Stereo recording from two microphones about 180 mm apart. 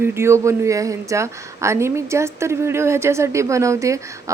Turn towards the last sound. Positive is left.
turn(degrees=-15)  # may be behind; listen again after turning